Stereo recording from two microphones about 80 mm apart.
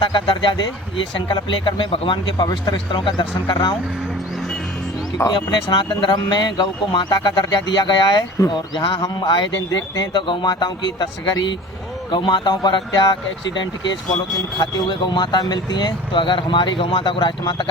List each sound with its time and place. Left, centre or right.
0.0 s speech: left
2.5 s speech: left
5.3 s speech: left
14.6 s speech: left